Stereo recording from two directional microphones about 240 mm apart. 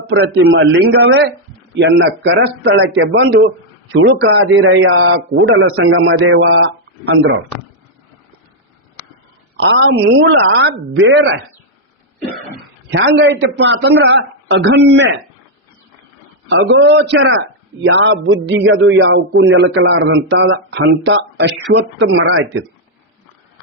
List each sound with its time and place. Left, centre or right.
0.1 s speech: right
9.6 s speech: right
12.9 s speech: right
16.5 s speech: right